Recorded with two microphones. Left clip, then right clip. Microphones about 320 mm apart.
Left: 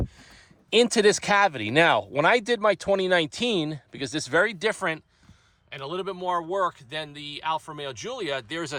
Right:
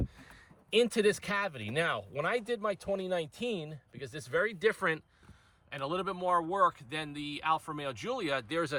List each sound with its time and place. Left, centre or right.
0.7 s speech: centre